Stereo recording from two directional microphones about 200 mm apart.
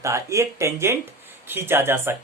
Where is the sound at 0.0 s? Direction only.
15° right (ahead or behind).